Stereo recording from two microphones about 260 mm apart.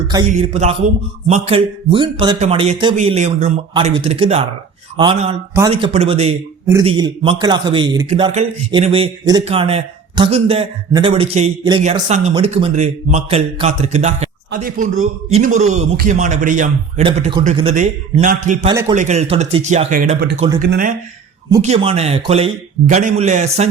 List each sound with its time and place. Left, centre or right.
0.3 s a man's voice: right
18.7 s speech: centre
18.9 s a man's voice: right
21.6 s a man's voice: right